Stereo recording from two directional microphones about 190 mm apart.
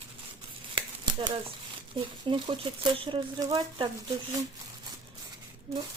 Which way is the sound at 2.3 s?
25° right (ahead or behind).